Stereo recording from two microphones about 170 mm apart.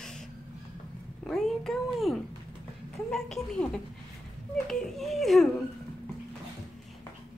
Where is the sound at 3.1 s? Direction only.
5° left (ahead or behind).